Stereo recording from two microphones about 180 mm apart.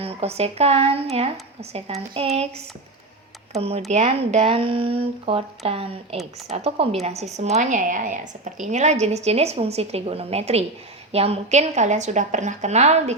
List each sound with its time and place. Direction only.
0.0 s speech: 35° right (ahead or behind)
3.6 s speech: 35° right (ahead or behind)